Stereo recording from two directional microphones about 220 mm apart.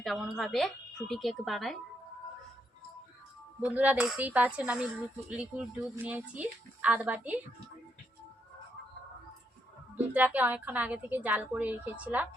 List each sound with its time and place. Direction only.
0.0 s speech: centre (ahead or behind)
3.6 s a woman's voice: 5° right (ahead or behind)
10.2 s a woman's voice: 5° right (ahead or behind)